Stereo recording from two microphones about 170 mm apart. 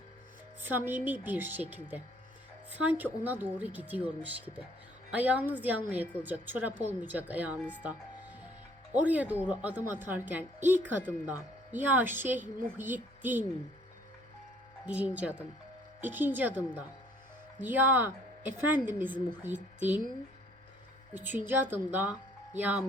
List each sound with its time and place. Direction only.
0.6 s a woman's voice: 10° right (ahead or behind)
8.9 s a woman's voice: 10° right (ahead or behind)
14.8 s a woman's voice: 10° right (ahead or behind)
21.1 s a woman's voice: 10° right (ahead or behind)